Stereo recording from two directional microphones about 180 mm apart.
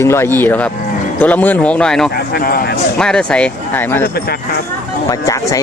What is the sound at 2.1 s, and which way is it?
Speech, 60° left (ahead or behind).